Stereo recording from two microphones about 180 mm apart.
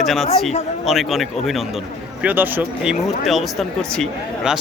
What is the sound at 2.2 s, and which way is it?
Speech, 10° right (ahead or behind).